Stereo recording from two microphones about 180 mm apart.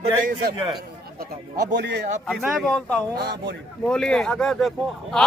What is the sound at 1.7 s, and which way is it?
Speech, 70° right (ahead or behind).